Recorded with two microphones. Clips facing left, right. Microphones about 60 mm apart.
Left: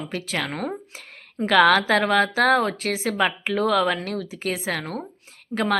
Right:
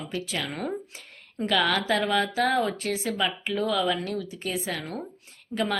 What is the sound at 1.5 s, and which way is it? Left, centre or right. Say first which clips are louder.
A woman's voice: left 8 dB; left.